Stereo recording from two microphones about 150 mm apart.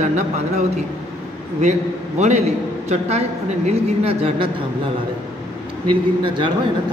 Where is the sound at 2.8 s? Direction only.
45° right (ahead or behind).